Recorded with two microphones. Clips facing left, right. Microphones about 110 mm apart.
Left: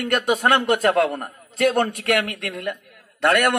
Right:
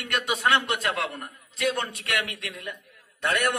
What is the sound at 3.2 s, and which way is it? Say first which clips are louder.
Speech: left 7 dB; 60° left (ahead or behind).